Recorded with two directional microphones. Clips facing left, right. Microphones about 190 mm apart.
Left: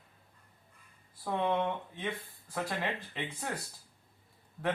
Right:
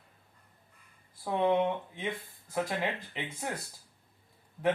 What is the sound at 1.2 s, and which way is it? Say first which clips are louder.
Speech: right 4 dB; 15° right (ahead or behind).